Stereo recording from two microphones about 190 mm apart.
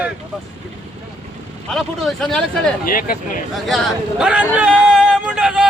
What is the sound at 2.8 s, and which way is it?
Speech, 45° left (ahead or behind).